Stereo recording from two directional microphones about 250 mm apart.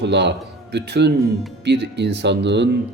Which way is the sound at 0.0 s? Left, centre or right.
Right.